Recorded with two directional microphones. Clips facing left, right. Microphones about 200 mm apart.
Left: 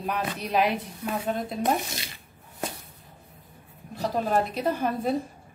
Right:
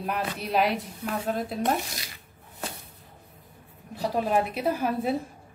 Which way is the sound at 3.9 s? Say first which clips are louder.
Even; 10° right (ahead or behind).